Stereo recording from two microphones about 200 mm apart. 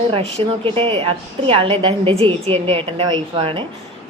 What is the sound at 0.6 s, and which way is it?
A woman's voice, 25° right (ahead or behind).